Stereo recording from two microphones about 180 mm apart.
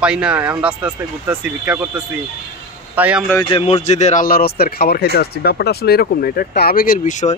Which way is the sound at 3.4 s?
30° left (ahead or behind).